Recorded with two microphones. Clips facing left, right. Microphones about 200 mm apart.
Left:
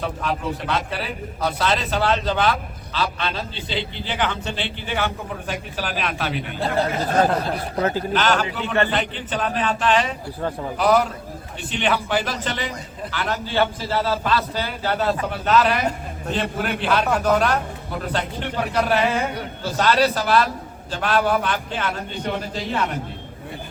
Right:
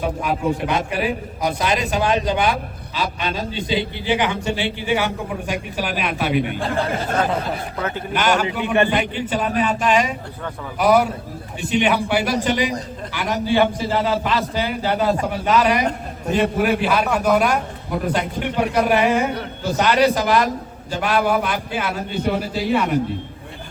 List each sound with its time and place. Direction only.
0.0 s a man's voice: 10° right (ahead or behind)
7.8 s a man's voice: 35° left (ahead or behind)
8.1 s a man's voice: 10° right (ahead or behind)